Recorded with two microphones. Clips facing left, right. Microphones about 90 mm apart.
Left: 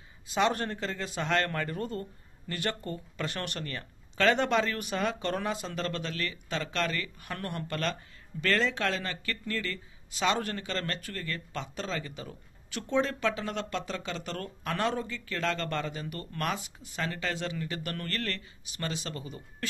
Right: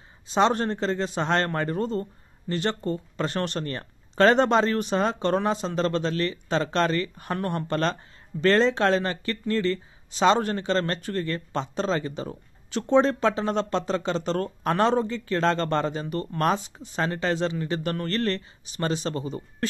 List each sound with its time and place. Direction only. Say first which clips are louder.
0.3 s speech: right 6 dB; 30° right (ahead or behind)